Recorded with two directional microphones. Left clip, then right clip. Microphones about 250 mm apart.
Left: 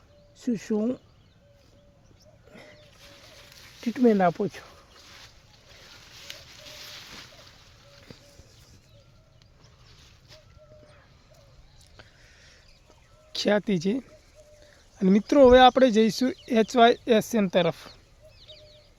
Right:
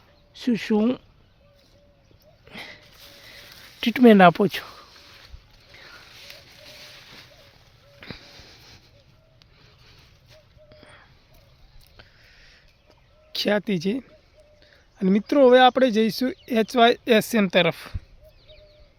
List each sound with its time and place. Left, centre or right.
0.3 s speech: right
2.5 s sniff: right
3.8 s speech: right
8.0 s a sound: right
11.9 s a sound: centre
13.3 s speech: centre